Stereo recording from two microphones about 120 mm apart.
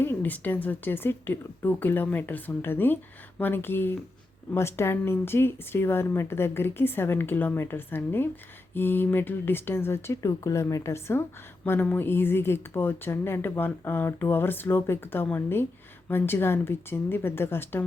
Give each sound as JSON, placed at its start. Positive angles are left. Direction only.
{"t": 0.0, "sound": "speech", "side_deg": 15}